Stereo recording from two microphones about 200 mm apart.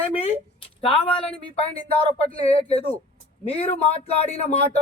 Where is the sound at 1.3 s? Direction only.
30° left (ahead or behind).